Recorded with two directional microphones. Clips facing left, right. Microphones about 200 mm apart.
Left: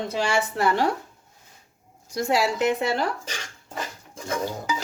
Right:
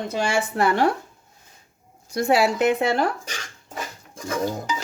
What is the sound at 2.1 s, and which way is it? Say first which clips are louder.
Speech: right 4 dB; 60° right (ahead or behind).